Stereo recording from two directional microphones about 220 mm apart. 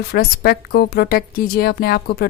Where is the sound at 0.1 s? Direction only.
45° left (ahead or behind).